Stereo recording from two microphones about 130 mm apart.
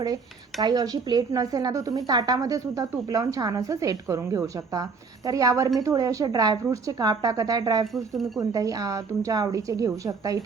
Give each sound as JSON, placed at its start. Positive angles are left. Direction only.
{"t": 0.6, "sound": "speech", "side_deg": -30}
{"t": 7.9, "sound": "speech", "side_deg": 0}
{"t": 8.4, "sound": "speech", "side_deg": -25}